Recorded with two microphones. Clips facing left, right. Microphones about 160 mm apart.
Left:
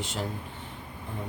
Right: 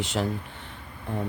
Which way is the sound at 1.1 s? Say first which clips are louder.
Right 8 dB; 65° right (ahead or behind).